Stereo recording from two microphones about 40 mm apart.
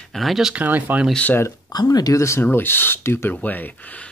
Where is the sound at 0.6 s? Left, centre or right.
Right.